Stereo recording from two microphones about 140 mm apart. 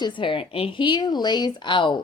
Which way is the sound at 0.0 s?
35° left (ahead or behind).